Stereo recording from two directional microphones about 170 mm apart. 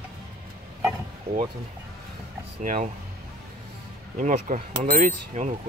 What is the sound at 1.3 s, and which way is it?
Speech, 65° right (ahead or behind).